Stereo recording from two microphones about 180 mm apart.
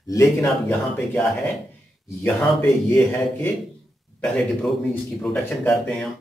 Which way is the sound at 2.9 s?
15° left (ahead or behind).